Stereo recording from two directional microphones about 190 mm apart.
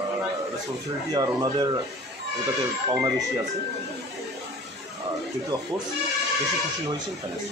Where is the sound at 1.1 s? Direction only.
20° right (ahead or behind).